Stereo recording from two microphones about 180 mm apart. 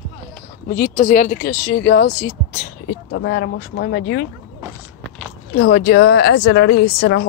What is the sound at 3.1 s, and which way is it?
Speech, 70° left (ahead or behind).